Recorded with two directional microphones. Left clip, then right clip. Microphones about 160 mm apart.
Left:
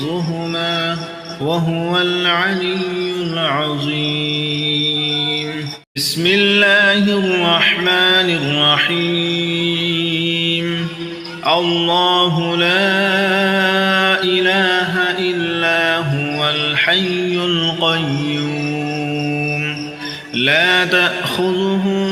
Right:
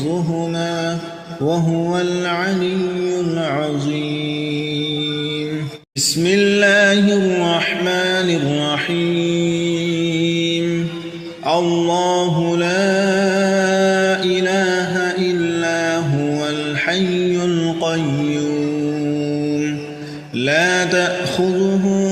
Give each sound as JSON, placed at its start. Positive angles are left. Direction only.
{"t": 1.9, "sound": "mantra", "side_deg": -40}
{"t": 6.2, "sound": "mantra", "side_deg": -45}
{"t": 11.4, "sound": "mantra", "side_deg": -45}
{"t": 15.6, "sound": "music", "side_deg": -40}
{"t": 16.7, "sound": "mantra", "side_deg": -50}
{"t": 17.4, "sound": "music", "side_deg": -40}
{"t": 20.4, "sound": "mantra", "side_deg": -50}